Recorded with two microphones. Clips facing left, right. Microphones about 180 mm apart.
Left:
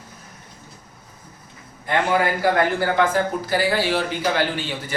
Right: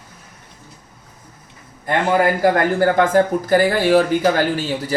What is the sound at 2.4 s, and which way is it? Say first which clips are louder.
Speech: right 4 dB; 45° right (ahead or behind).